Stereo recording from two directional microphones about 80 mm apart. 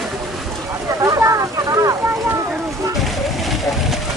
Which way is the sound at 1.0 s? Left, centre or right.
Right.